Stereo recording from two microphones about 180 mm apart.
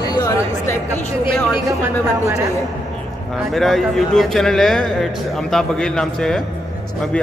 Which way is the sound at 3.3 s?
Centre (ahead or behind).